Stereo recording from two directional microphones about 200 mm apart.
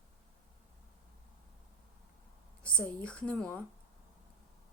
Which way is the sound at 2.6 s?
5° left (ahead or behind).